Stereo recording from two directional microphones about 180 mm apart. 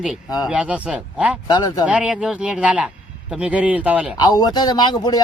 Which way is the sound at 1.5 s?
20° left (ahead or behind).